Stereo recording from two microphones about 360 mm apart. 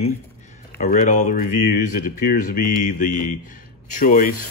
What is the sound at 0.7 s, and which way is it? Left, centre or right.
Speech, left.